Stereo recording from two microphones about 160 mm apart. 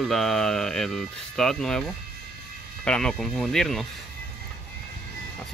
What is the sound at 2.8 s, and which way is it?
Speech, 5° left (ahead or behind).